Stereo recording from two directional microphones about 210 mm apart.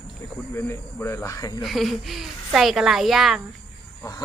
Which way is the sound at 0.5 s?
10° left (ahead or behind).